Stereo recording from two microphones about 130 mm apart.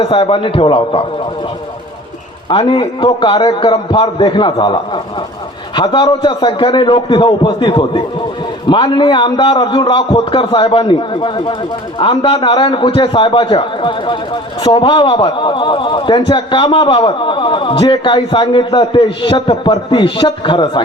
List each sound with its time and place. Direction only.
0.0 s a man's voice: 45° left (ahead or behind)
2.5 s a man's voice: 40° left (ahead or behind)